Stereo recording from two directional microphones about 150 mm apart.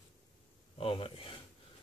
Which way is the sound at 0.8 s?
35° left (ahead or behind).